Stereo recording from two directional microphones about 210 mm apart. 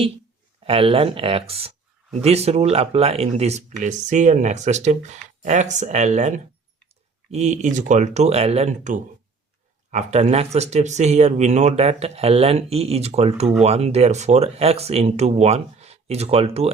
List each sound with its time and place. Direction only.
0.6 s speech: 25° right (ahead or behind)